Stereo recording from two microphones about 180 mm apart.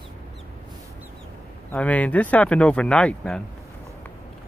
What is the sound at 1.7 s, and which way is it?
Speech, 10° left (ahead or behind).